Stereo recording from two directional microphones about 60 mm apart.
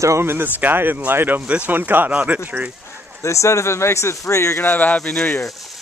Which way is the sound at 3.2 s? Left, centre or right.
Left.